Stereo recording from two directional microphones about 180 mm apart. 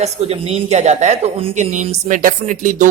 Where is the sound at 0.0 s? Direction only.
35° right (ahead or behind).